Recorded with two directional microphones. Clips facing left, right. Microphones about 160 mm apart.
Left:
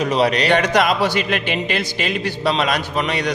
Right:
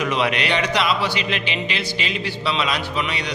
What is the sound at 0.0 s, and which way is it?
A man's voice, 35° left (ahead or behind).